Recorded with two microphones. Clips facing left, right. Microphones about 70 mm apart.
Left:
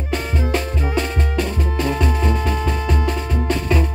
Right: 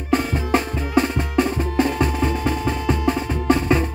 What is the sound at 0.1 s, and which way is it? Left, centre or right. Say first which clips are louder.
Music: right 3 dB; right.